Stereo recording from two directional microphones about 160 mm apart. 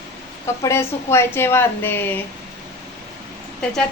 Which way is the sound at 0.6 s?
15° left (ahead or behind).